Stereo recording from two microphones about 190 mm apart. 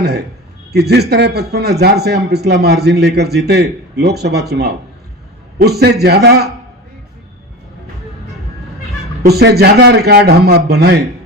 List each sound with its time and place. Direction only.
0.0 s a sound: 60° right (ahead or behind)
0.7 s a man's voice: 60° right (ahead or behind)
9.2 s a man's voice: 55° right (ahead or behind)